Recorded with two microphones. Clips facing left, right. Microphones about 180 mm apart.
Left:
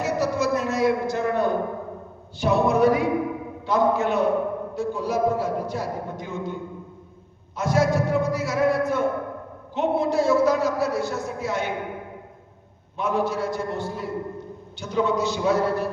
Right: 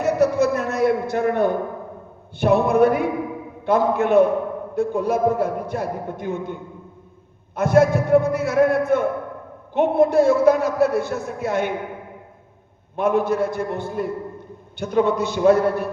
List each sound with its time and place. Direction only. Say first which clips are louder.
0.0 s a sound: right 6 dB; 60° right (ahead or behind)
3.7 s a man's voice: right 3 dB; 55° right (ahead or behind)
13.0 s a man's voice: right 5 dB; 55° right (ahead or behind)